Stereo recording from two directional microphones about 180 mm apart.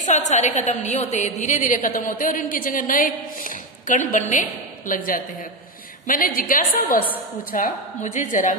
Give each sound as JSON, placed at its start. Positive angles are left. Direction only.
{"t": 0.0, "sound": "a woman's voice", "side_deg": 40}